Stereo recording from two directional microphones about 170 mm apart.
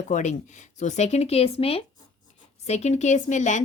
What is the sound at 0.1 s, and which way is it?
A woman's voice, 45° left (ahead or behind).